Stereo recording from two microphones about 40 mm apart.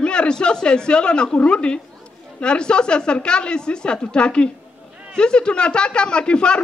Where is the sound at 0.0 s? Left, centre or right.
Left.